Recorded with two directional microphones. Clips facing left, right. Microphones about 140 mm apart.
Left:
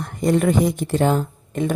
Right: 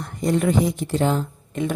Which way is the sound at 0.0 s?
55° left (ahead or behind).